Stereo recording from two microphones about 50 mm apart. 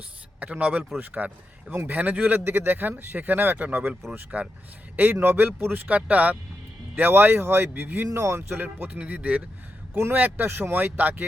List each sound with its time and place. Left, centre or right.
0.3 s speech: right
1.7 s speech: right
2.0 s speech: right
2.4 s speech: right
4.3 s speech: right
5.1 s a man's voice: right
5.4 s speech: right
6.9 s speech: right
8.1 s speech: right
8.4 s speech: right
8.6 s speech: right